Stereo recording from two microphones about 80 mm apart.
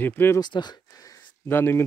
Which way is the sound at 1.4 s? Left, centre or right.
Left.